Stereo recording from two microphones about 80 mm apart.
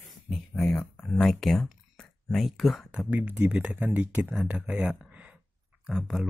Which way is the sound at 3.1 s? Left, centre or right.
Centre.